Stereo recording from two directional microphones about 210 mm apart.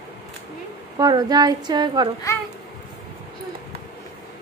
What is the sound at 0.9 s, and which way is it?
A woman's voice, 20° right (ahead or behind).